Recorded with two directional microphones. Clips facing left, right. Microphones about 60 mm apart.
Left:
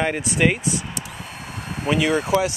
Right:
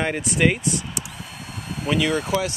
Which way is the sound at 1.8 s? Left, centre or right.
Centre.